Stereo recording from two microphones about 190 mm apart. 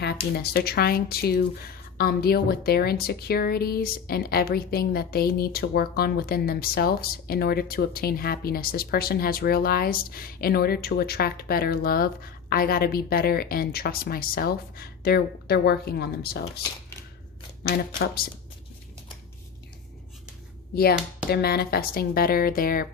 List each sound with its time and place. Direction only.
0.0 s a woman's voice: 60° left (ahead or behind)
21.2 s a woman's voice: 55° left (ahead or behind)